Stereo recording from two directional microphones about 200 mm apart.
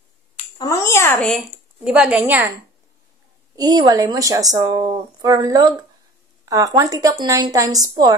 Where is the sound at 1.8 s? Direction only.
5° right (ahead or behind).